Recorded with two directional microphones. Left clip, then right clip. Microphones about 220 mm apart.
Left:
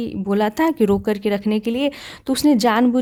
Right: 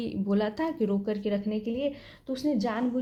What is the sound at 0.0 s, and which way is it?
Speech, 30° left (ahead or behind).